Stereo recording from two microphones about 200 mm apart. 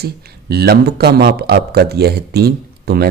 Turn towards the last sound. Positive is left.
turn(degrees=-50)  # may be behind; listen again after turning